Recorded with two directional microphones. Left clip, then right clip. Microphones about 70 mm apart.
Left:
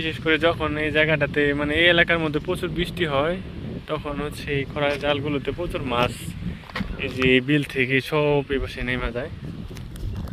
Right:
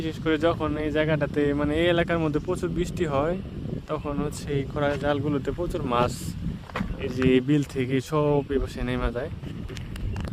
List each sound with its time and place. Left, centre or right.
0.0 s speech: right; by 4.2 s centre
4.8 s speech: right
5.7 s speech: right
7.4 s speech: right
7.8 s speech: right
8.9 s speech: right